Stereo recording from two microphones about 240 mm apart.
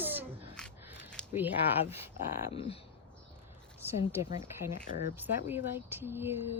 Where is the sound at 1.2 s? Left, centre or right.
Centre.